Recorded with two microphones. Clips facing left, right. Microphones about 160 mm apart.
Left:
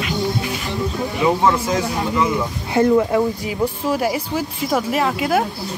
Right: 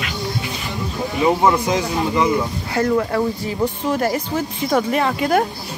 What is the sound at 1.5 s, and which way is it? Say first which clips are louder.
Speech: right 1 dB; 15° right (ahead or behind).